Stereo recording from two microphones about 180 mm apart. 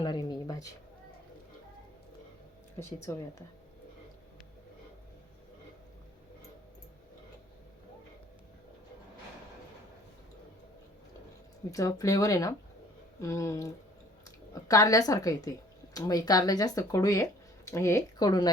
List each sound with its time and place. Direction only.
0.0 s a sound: 25° left (ahead or behind)
2.7 s speech: 15° left (ahead or behind)
11.7 s speech: 20° left (ahead or behind)